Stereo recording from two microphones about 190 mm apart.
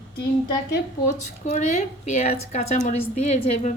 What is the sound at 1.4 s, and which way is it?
A woman's voice, 35° left (ahead or behind).